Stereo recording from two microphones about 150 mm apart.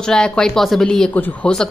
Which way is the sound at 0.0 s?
5° left (ahead or behind).